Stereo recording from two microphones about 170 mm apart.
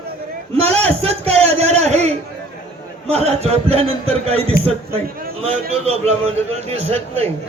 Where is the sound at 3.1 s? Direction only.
35° right (ahead or behind).